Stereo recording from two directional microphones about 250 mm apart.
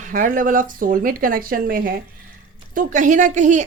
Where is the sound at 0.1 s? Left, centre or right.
Right.